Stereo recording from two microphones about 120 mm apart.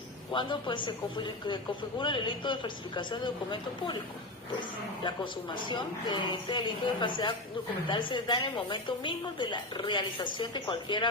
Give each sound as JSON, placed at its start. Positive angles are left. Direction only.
{"t": 0.3, "sound": "a woman's voice", "side_deg": 40}
{"t": 5.0, "sound": "a woman's voice", "side_deg": 40}